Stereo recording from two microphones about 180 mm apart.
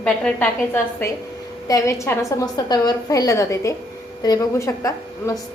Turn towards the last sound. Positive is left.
turn(degrees=20)  # may be behind; listen again after turning